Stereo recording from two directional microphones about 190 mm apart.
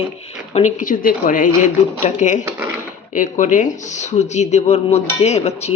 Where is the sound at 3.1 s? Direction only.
45° left (ahead or behind).